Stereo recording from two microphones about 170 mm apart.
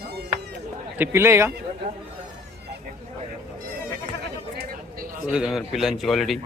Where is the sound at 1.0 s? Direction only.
15° right (ahead or behind).